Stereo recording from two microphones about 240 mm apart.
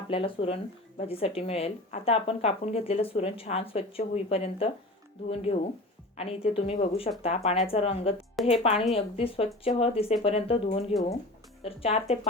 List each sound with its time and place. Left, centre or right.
0.1 s speech: left